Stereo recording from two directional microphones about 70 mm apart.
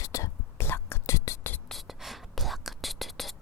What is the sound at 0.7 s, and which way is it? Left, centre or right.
Whispering, left.